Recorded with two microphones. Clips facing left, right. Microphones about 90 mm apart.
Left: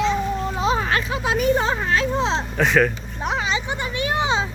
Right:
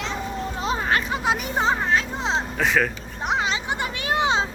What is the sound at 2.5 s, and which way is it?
Speech, centre (ahead or behind).